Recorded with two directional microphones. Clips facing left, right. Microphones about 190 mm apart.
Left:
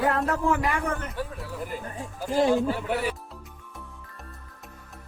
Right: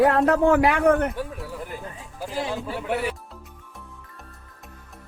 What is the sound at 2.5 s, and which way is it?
Speech, 5° right (ahead or behind).